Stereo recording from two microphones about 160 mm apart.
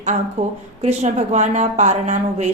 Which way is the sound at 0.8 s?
45° right (ahead or behind).